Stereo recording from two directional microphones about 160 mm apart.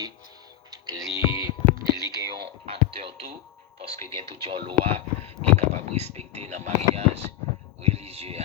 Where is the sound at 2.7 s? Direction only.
35° right (ahead or behind).